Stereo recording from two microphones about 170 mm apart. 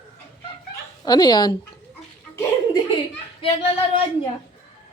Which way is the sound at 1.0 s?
25° left (ahead or behind).